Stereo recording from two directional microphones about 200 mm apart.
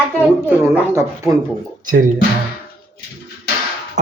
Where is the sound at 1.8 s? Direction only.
40° right (ahead or behind).